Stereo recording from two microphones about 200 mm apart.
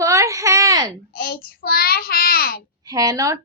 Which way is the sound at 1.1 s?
50° left (ahead or behind).